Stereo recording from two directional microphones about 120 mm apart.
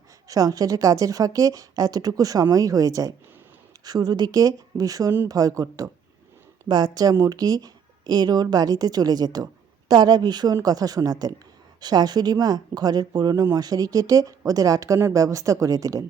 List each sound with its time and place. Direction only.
0.3 s speech: 30° right (ahead or behind)